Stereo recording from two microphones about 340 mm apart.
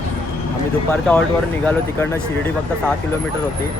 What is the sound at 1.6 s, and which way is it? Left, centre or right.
Speech, centre.